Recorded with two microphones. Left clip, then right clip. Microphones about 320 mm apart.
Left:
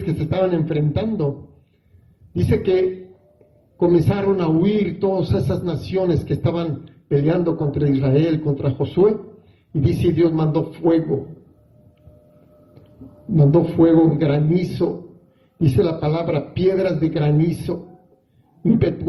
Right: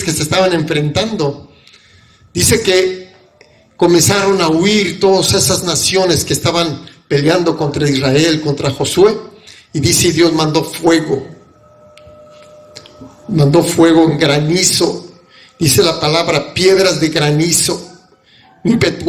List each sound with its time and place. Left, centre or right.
0.0 s a man's voice: right
2.3 s a man's voice: right
3.8 s a man's voice: right
13.3 s a man's voice: right